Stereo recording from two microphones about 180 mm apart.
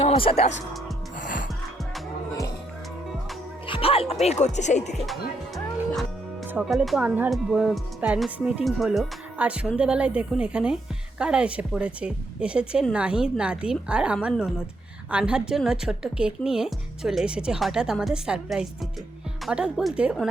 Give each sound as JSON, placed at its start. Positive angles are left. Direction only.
{"t": 0.0, "sound": "speech", "side_deg": 30}
{"t": 1.2, "sound": "music", "side_deg": 45}
{"t": 3.7, "sound": "speech", "side_deg": 30}
{"t": 6.5, "sound": "speech", "side_deg": -5}